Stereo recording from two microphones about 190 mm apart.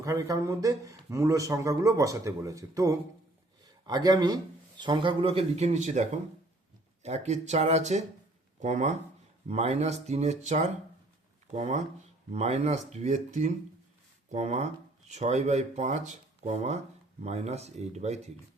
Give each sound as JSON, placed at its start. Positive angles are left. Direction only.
{"t": 0.0, "sound": "speech", "side_deg": -15}